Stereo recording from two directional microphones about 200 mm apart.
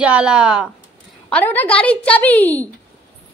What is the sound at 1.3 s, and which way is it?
A woman's voice, 10° left (ahead or behind).